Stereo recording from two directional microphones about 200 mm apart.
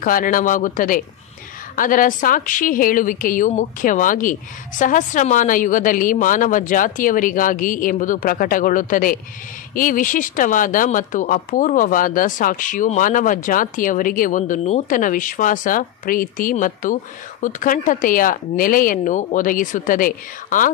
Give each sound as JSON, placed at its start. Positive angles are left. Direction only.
{"t": 0.0, "sound": "speech", "side_deg": 45}